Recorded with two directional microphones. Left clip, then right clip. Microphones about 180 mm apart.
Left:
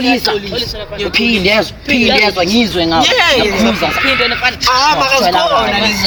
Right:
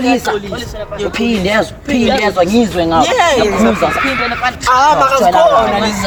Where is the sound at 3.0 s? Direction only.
15° right (ahead or behind).